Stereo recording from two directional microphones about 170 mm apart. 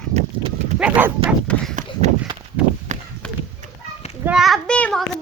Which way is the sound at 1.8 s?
45° right (ahead or behind).